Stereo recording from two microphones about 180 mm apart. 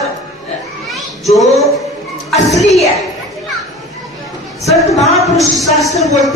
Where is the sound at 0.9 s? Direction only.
Centre (ahead or behind).